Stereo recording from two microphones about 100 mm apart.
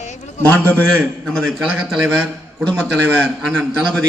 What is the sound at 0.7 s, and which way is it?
Speech, 15° left (ahead or behind).